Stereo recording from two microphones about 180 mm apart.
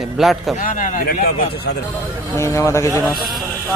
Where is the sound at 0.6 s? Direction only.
45° left (ahead or behind).